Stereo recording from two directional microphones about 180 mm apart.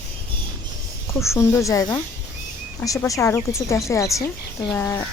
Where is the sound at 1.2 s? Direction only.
15° left (ahead or behind).